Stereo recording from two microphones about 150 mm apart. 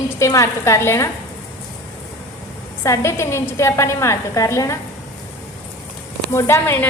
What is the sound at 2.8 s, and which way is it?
A woman's voice, 20° left (ahead or behind).